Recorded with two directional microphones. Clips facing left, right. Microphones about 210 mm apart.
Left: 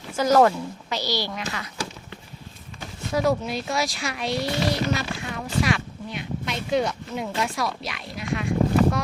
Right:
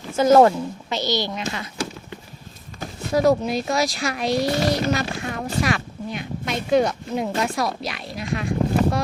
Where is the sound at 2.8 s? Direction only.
40° right (ahead or behind).